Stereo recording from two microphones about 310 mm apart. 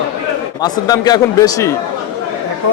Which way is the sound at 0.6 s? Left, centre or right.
Centre.